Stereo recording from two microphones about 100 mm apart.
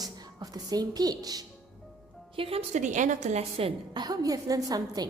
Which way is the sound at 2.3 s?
70° right (ahead or behind).